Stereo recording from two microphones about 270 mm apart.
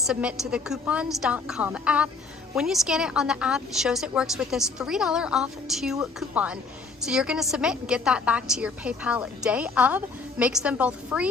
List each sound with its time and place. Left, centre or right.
0.1 s a woman's voice: centre